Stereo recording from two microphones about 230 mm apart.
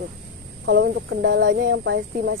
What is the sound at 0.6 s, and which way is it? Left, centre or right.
Speech, right.